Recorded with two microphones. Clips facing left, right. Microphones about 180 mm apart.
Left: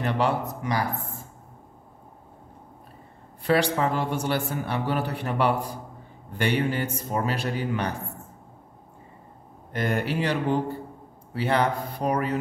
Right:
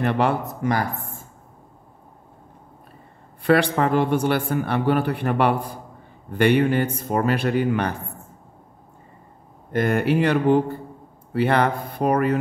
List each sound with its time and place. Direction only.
0.0 s speech: 55° right (ahead or behind)
3.4 s a man's voice: 60° right (ahead or behind)
9.7 s a man's voice: 55° right (ahead or behind)